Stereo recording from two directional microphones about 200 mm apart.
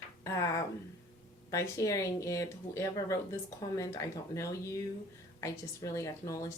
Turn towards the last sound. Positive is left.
turn(degrees=15)  # may be behind; listen again after turning